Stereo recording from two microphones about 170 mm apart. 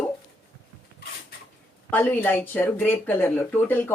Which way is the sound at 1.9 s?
10° left (ahead or behind).